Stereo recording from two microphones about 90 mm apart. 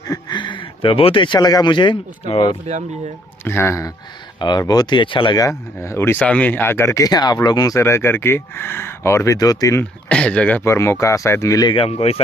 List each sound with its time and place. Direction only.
0.1 s speech: 55° left (ahead or behind); by 2.5 s 75° left (ahead or behind)
3.4 s speech: 25° left (ahead or behind)
4.4 s speech: 55° left (ahead or behind); by 5.4 s 70° left (ahead or behind)
5.4 s speech: 35° left (ahead or behind)
6.1 s speech: 15° left (ahead or behind)
7.1 s speech: 50° left (ahead or behind)
7.8 s speech: 30° left (ahead or behind)
10.0 s speech: 10° left (ahead or behind)
10.6 s speech: 30° left (ahead or behind)
11.7 s speech: 90° left